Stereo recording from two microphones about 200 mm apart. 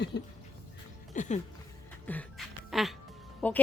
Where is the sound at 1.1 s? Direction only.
40° left (ahead or behind).